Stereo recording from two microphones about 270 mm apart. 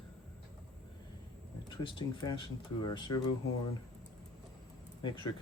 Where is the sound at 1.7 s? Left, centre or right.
Centre.